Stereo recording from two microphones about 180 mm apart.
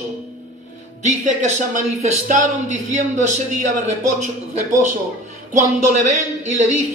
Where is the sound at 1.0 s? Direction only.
40° right (ahead or behind).